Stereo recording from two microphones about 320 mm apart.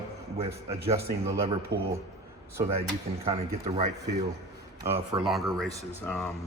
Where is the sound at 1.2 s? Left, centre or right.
Centre.